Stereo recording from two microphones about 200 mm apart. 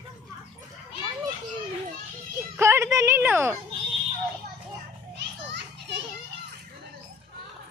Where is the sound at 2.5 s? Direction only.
15° right (ahead or behind).